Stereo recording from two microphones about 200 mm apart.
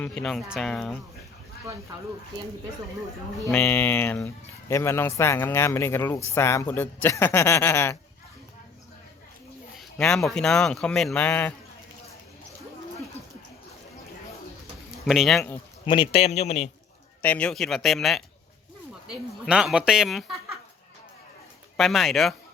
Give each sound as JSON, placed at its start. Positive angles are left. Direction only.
{"t": 0.0, "sound": "speech", "side_deg": 5}
{"t": 3.5, "sound": "speech", "side_deg": 10}
{"t": 9.7, "sound": "speech", "side_deg": 5}
{"t": 15.0, "sound": "speech", "side_deg": 0}
{"t": 15.9, "sound": "a man's voice", "side_deg": 25}
{"t": 17.2, "sound": "speech", "side_deg": 5}
{"t": 19.5, "sound": "speech", "side_deg": -5}
{"t": 21.8, "sound": "speech", "side_deg": 0}